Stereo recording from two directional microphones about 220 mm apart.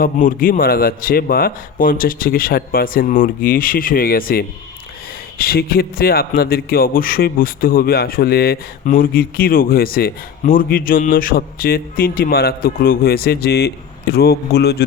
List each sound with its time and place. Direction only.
0.0 s a man's voice: 40° left (ahead or behind)